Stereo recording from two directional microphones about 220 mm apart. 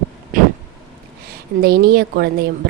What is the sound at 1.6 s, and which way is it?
Speech, 45° right (ahead or behind).